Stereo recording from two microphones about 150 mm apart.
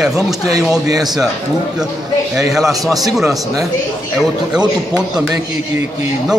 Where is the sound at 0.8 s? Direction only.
25° right (ahead or behind).